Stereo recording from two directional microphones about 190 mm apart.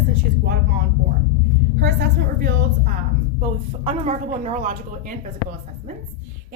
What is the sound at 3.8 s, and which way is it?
A woman's voice, 35° right (ahead or behind).